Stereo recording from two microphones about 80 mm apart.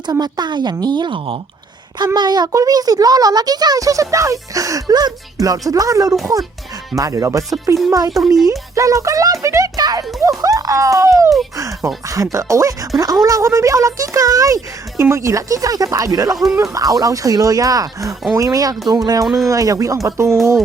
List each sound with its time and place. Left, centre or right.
0.1 s a woman's voice: right
2.1 s speech: right
2.5 s speech: right
9.7 s a child's voice: right
19.2 s speech: centre
19.5 s speech: right